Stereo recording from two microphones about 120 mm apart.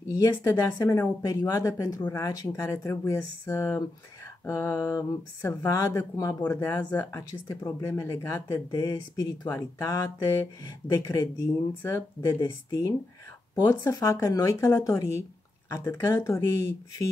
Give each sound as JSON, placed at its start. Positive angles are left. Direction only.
{"t": 0.1, "sound": "speech", "side_deg": 30}